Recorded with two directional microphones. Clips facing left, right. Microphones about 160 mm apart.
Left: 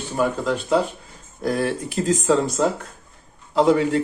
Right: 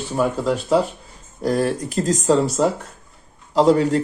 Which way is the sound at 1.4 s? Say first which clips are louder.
Right 3 dB; 40° right (ahead or behind).